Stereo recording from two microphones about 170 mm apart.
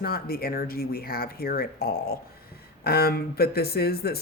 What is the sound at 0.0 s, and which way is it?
Speech, 60° left (ahead or behind).